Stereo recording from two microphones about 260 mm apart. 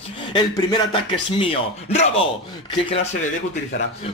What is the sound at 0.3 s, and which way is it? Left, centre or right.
Speech, centre.